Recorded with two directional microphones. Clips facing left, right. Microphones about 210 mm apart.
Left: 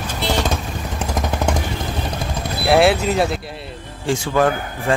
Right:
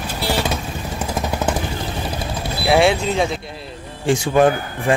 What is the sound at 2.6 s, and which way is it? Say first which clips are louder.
Speech: left 1 dB; centre (ahead or behind).